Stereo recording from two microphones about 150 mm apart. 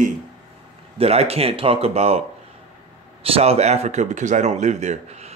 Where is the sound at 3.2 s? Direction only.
40° right (ahead or behind).